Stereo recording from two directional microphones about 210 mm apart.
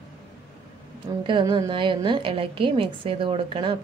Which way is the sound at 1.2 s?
25° right (ahead or behind).